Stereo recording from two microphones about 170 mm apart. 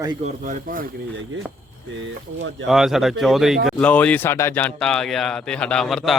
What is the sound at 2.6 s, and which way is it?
A man's voice, centre (ahead or behind).